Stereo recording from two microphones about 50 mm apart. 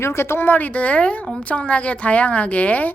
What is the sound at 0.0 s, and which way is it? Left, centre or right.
A woman's voice, left.